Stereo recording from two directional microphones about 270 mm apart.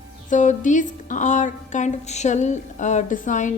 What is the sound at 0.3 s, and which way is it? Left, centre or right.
Speech, left.